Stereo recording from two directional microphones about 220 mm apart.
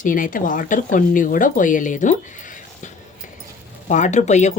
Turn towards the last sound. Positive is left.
turn(degrees=30)  # may be behind; listen again after turning